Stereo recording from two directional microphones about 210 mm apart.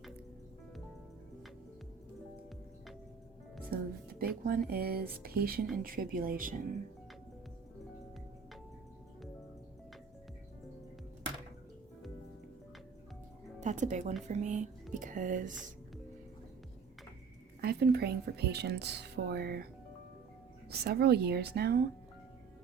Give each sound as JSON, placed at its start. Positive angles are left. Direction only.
{"t": 3.7, "sound": "speech", "side_deg": -45}
{"t": 13.6, "sound": "speech", "side_deg": -35}
{"t": 17.6, "sound": "speech", "side_deg": -50}
{"t": 20.7, "sound": "speech", "side_deg": -50}